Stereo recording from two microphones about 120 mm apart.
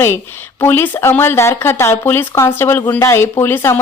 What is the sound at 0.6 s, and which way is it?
Speech, 20° left (ahead or behind).